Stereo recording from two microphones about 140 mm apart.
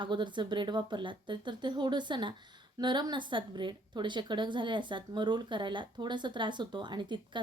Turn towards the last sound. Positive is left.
turn(degrees=-35)  # may be behind; listen again after turning